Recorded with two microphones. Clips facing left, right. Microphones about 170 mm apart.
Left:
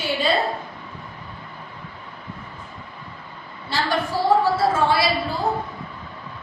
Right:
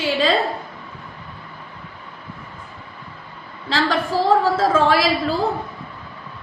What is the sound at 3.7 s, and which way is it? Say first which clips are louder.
A woman's voice: right 3 dB; 90° right.